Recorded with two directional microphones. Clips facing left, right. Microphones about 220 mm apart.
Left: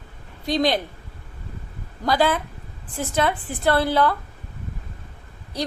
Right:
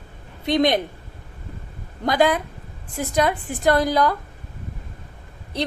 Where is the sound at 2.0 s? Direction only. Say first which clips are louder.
Right 2 dB; 15° right (ahead or behind).